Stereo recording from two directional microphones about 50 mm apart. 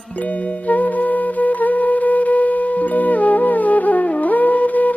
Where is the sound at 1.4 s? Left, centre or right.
Left.